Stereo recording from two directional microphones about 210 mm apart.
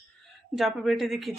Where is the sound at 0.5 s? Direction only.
Centre (ahead or behind).